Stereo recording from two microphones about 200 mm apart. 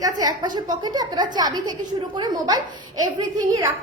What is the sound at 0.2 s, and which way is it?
A woman's voice, 20° right (ahead or behind).